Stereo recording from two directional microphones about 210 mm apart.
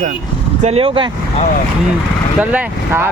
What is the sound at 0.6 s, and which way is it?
Speech, 30° right (ahead or behind).